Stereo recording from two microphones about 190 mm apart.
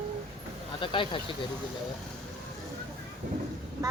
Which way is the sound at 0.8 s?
25° left (ahead or behind).